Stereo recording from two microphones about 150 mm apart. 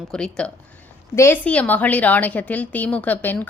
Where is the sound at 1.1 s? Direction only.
15° left (ahead or behind).